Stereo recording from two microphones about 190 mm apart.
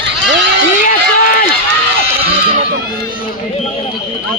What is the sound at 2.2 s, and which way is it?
Speech, 30° right (ahead or behind).